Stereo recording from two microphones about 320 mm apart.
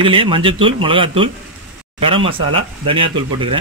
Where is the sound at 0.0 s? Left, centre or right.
Centre.